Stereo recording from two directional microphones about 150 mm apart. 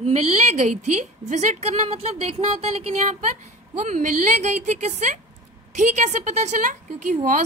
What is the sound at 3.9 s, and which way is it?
A woman's voice, 60° right (ahead or behind).